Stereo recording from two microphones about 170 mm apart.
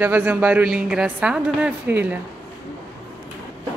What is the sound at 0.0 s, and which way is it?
A woman's voice, 10° right (ahead or behind).